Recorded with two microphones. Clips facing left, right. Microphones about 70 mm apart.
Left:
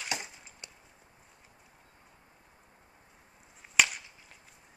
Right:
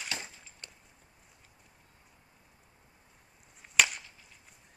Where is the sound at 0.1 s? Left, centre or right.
Centre.